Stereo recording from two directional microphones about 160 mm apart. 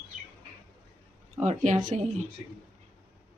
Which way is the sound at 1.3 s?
45° right (ahead or behind).